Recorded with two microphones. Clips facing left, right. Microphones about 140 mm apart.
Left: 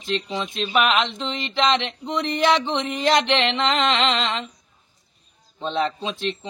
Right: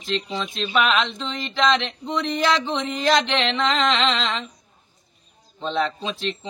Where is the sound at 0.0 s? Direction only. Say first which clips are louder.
Left 1 dB; 15° left (ahead or behind).